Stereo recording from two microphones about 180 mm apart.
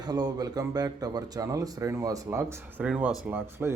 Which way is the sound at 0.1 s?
20° right (ahead or behind).